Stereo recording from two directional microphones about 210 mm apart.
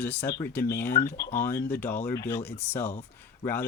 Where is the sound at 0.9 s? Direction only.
45° left (ahead or behind).